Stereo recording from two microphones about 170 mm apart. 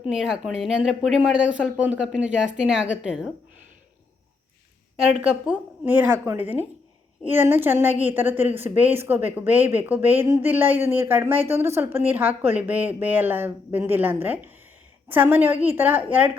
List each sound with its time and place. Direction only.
0.0 s speech: 5° right (ahead or behind)
5.2 s speech: 5° right (ahead or behind)